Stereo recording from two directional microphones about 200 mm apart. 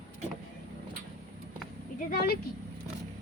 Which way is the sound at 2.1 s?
50° left (ahead or behind).